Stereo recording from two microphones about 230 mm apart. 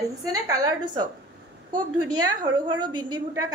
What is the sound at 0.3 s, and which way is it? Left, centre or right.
Speech, centre.